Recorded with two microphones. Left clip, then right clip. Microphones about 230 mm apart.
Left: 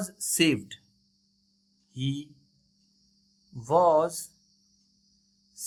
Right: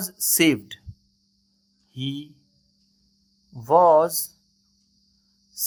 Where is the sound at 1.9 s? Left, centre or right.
Right.